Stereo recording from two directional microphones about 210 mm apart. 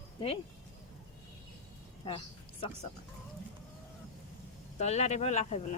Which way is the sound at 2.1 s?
25° left (ahead or behind).